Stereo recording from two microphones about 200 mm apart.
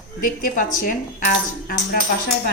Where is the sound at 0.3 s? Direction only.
45° left (ahead or behind).